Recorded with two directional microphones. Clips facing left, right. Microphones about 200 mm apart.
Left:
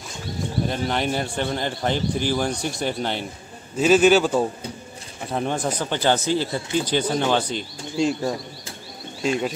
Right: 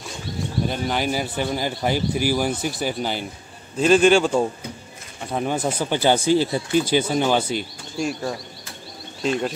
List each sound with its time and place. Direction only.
0.7 s a man's voice: 5° right (ahead or behind)
5.3 s speech: 5° right (ahead or behind)
7.9 s speech: 20° left (ahead or behind)
9.2 s a man's voice: 5° left (ahead or behind)